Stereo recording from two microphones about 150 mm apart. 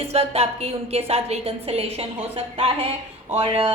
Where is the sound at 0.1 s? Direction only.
40° right (ahead or behind).